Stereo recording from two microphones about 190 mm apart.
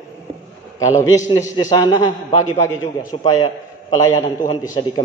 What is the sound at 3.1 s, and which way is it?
Speech, 15° left (ahead or behind).